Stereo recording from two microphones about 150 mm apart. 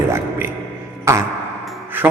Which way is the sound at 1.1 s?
20° right (ahead or behind).